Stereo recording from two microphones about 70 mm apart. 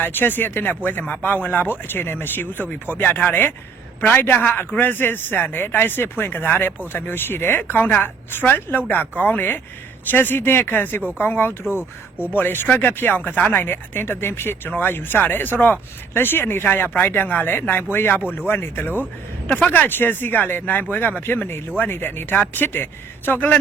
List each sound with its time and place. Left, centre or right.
0.0 s speech: left